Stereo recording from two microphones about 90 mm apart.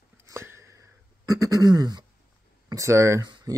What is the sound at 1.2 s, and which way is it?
Throat clearing, 40° right (ahead or behind).